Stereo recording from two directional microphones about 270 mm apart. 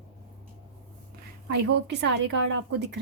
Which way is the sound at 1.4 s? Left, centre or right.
Right.